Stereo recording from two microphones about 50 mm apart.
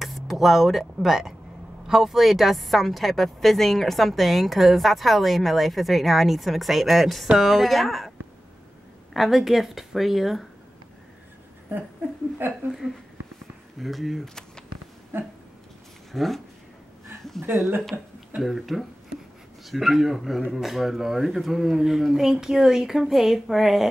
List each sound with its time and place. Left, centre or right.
0.0 s speech: centre
9.1 s speech: centre
12.4 s speech: right
13.7 s speech: centre
14.2 s a sound: centre
15.1 s a sound: right
16.1 s speech: centre
17.5 s a sound: right
18.4 s speech: centre